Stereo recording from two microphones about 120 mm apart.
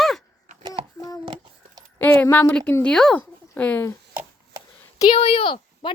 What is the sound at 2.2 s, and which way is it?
A woman's voice, 15° left (ahead or behind).